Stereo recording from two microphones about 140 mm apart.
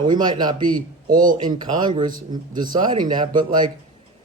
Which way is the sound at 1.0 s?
70° right (ahead or behind).